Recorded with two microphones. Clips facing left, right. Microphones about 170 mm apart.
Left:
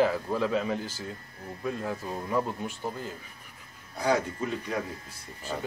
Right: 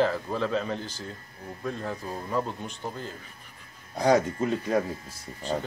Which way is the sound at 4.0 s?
40° right (ahead or behind).